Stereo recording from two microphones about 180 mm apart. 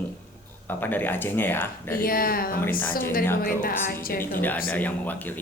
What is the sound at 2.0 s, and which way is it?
Speech, 55° left (ahead or behind).